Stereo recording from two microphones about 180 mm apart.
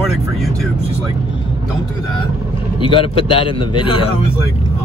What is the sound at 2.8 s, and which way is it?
A man's voice, 30° left (ahead or behind).